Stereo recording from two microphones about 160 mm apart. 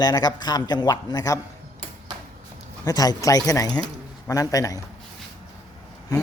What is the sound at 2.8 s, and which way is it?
A man's voice, 25° left (ahead or behind).